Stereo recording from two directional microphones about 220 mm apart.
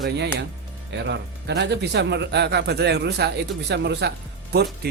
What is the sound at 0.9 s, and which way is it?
A woman's voice, 50° right (ahead or behind).